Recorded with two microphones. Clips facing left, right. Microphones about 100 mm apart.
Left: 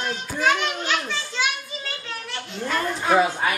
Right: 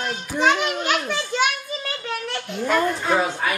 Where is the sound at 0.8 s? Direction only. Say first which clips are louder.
Right 3 dB; 50° right (ahead or behind).